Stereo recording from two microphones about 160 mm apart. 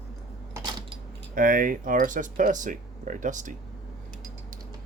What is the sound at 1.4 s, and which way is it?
Speech, 60° right (ahead or behind).